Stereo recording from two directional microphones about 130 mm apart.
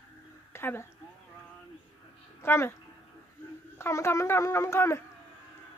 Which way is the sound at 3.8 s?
20° left (ahead or behind).